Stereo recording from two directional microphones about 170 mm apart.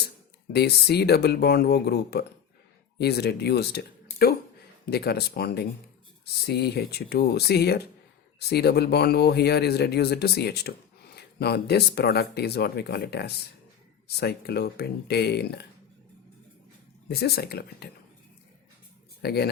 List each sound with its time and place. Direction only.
0.5 s speech: 70° left (ahead or behind)
17.1 s speech: 70° left (ahead or behind)
19.2 s speech: 70° left (ahead or behind)